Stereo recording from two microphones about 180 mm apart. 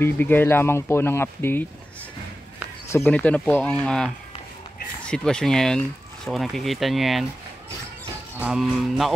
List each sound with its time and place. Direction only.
0.0 s speech: 10° left (ahead or behind)
2.9 s speech: 10° left (ahead or behind)
8.4 s speech: centre (ahead or behind)